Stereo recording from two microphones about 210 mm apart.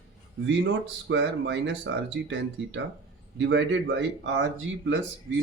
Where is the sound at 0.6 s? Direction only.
60° right (ahead or behind).